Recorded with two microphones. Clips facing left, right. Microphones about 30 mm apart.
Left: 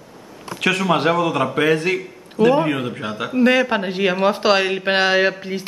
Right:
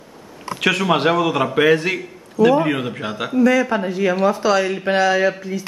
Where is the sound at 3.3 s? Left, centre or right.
Left.